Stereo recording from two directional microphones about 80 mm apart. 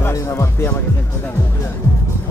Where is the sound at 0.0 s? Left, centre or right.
Left.